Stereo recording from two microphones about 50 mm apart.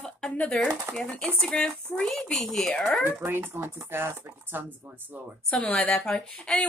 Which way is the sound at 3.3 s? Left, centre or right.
Right.